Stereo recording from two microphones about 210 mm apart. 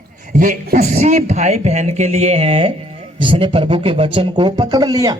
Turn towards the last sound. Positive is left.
turn(degrees=-15)  # may be behind; listen again after turning